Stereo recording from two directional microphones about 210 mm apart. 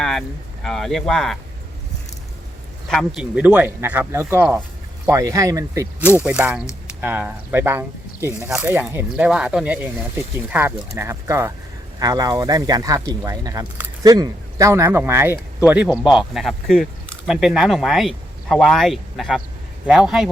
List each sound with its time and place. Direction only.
0.0 s speech: centre (ahead or behind)
2.9 s speech: centre (ahead or behind)